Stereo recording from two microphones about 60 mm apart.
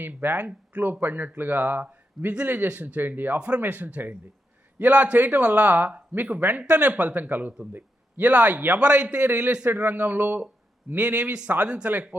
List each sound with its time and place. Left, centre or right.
0.0 s speech: right